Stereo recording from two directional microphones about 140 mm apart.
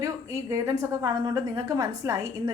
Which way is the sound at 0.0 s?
20° right (ahead or behind).